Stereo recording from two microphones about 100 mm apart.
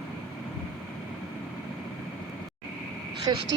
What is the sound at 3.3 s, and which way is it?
Speech, 40° right (ahead or behind).